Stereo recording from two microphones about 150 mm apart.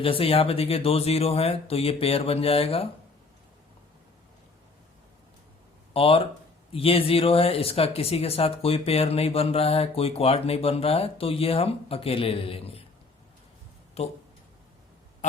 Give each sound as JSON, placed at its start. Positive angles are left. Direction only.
{"t": 0.0, "sound": "speech", "side_deg": 40}
{"t": 5.9, "sound": "speech", "side_deg": 40}
{"t": 14.0, "sound": "speech", "side_deg": 45}